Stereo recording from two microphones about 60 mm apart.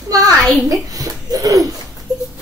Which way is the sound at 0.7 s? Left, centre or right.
Right.